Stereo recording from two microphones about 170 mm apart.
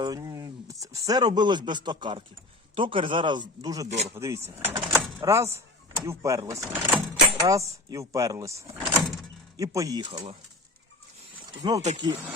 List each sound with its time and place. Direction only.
0.0 s speech: 20° right (ahead or behind)
3.8 s speech: 40° right (ahead or behind)
4.1 s speech: 15° right (ahead or behind)
11.6 s speech: 25° right (ahead or behind)